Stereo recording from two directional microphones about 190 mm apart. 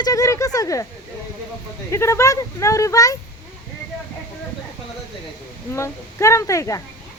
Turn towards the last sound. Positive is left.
turn(degrees=15)  # may be behind; listen again after turning